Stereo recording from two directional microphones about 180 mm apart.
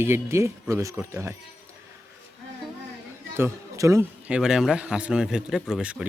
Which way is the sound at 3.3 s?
15° right (ahead or behind).